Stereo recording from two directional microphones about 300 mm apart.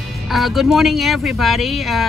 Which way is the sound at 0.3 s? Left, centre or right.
Centre.